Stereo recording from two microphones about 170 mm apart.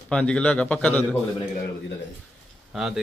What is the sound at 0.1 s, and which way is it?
Speech, 5° left (ahead or behind).